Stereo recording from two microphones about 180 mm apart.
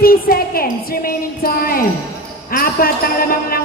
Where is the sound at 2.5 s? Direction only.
55° left (ahead or behind).